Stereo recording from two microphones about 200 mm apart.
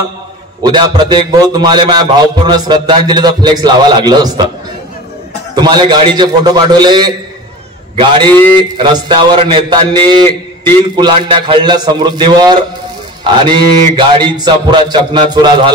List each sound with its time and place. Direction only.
0.6 s a man's voice: 20° right (ahead or behind)
5.6 s a man's voice: 20° right (ahead or behind)
8.7 s a man's voice: 25° right (ahead or behind)